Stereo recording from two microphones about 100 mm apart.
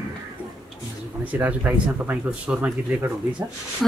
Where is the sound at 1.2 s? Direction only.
15° right (ahead or behind).